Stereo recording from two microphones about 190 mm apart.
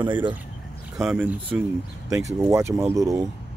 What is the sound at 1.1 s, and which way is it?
Speech, 5° right (ahead or behind).